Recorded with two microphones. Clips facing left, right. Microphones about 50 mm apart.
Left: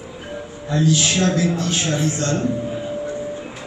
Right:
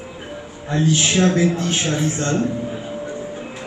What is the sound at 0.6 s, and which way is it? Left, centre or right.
Speech, right.